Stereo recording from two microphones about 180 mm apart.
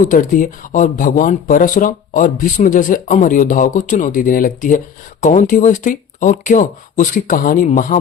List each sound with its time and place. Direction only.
0.0 s speech: 50° left (ahead or behind)